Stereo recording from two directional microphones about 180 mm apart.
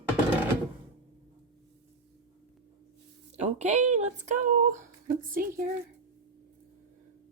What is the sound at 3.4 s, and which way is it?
Speech, 40° right (ahead or behind).